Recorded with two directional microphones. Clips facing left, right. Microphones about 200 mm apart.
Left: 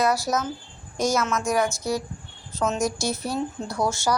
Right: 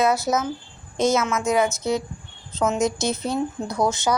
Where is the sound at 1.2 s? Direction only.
5° right (ahead or behind).